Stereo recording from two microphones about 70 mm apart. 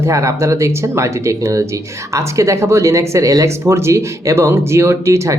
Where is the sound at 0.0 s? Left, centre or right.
Right.